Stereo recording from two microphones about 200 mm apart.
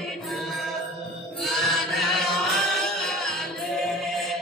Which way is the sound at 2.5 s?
Centre (ahead or behind).